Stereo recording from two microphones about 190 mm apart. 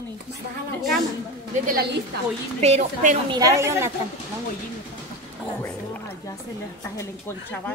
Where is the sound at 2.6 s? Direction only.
35° right (ahead or behind).